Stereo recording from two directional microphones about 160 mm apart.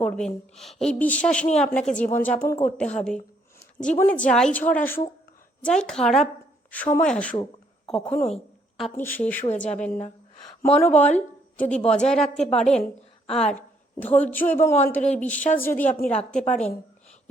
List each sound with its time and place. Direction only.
0.0 s a woman's voice: 5° left (ahead or behind)
9.4 s speech: 45° left (ahead or behind)
9.7 s a woman's voice: 5° left (ahead or behind)